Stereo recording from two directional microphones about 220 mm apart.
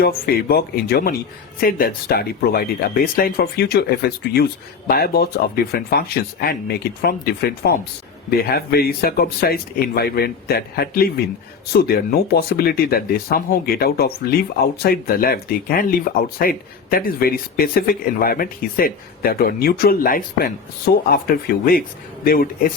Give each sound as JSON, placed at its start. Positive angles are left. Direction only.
{"t": 0.0, "sound": "speech", "side_deg": 45}